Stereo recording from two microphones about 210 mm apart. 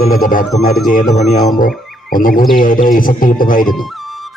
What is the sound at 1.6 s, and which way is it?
Music, 40° left (ahead or behind).